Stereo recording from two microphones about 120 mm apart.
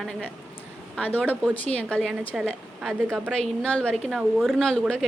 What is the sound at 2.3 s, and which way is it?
Speech, 5° right (ahead or behind).